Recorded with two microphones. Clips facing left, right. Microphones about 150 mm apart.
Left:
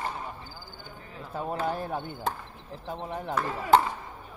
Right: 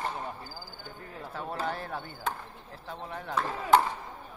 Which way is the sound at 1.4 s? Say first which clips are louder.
Left 4 dB; 45° left (ahead or behind).